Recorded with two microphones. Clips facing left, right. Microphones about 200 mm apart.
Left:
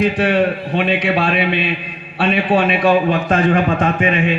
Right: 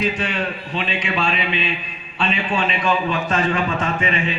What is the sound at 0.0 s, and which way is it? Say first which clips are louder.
A man's voice: left 8 dB; 55° left (ahead or behind).